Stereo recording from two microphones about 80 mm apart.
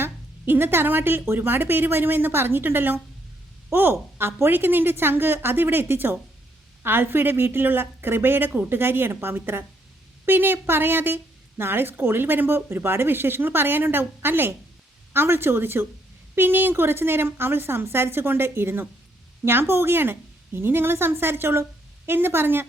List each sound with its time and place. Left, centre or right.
0.0 s a woman's voice: right